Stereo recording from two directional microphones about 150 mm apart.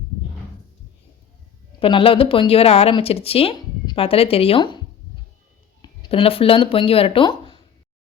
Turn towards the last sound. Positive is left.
turn(degrees=30)  # may be behind; listen again after turning